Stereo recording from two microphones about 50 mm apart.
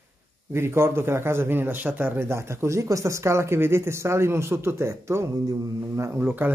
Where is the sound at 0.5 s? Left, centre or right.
Right.